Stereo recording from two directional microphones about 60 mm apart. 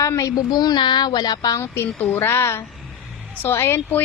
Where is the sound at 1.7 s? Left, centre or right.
Left.